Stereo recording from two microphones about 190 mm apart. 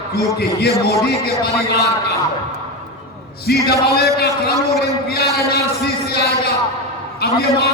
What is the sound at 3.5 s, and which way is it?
Speech, 55° left (ahead or behind).